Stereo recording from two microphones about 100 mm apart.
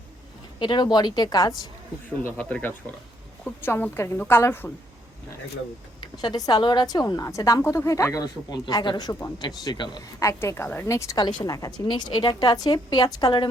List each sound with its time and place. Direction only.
0.6 s a woman's voice: 50° left (ahead or behind)
2.4 s a woman's voice: 15° left (ahead or behind)
6.2 s a woman's voice: 40° left (ahead or behind)
10.2 s a woman's voice: 30° left (ahead or behind)
11.9 s a woman's voice: 45° left (ahead or behind)